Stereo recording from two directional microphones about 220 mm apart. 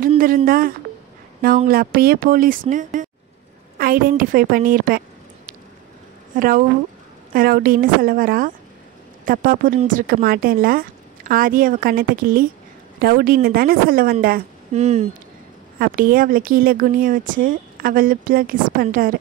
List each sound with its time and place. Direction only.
0.5 s speech: 40° right (ahead or behind)
6.3 s speech: 40° right (ahead or behind)
14.7 s speech: 30° right (ahead or behind)
15.8 s speech: 40° right (ahead or behind)